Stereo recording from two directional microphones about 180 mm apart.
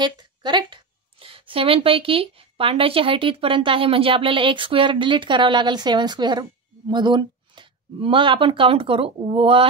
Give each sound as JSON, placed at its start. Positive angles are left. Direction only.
{"t": 0.0, "sound": "a woman's voice", "side_deg": -25}